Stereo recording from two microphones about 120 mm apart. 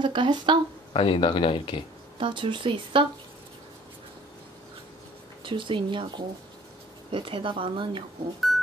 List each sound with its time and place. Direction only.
0.0 s speech: 40° right (ahead or behind)
0.9 s speech: 45° left (ahead or behind)
2.1 s a woman's voice: 45° right (ahead or behind)
5.4 s a woman's voice: 45° right (ahead or behind)